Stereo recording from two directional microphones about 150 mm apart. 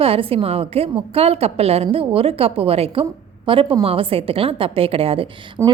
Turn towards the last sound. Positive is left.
turn(degrees=-35)  # may be behind; listen again after turning